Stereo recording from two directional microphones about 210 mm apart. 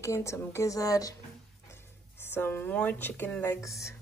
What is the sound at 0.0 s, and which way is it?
A woman's voice, 15° left (ahead or behind).